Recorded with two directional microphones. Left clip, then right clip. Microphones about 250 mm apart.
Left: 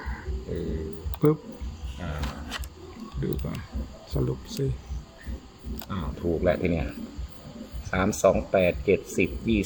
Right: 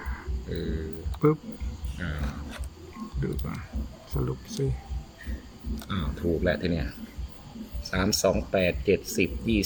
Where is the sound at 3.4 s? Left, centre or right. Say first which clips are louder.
Left 1 dB; centre.